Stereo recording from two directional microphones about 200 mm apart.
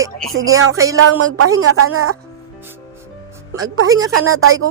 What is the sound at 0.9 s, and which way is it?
A woman's voice, 90° right.